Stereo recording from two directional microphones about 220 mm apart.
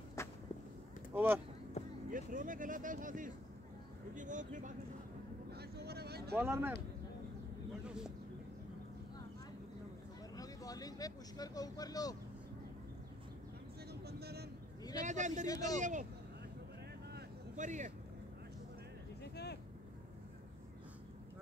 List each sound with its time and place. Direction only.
0.2 s whip: 10° left (ahead or behind)
1.1 s speech: 10° right (ahead or behind)
2.0 s speech: 40° right (ahead or behind)
5.5 s vehicle: 45° right (ahead or behind)
6.3 s speech: 10° right (ahead or behind)
7.8 s speech: 5° right (ahead or behind)
10.3 s speech: 15° left (ahead or behind)
14.0 s vehicle: 45° right (ahead or behind)
15.0 s speech: 35° right (ahead or behind)
15.4 s speech: 15° left (ahead or behind)
15.8 s speech: 35° right (ahead or behind)
17.6 s speech: 35° right (ahead or behind)
19.2 s vehicle: 50° left (ahead or behind)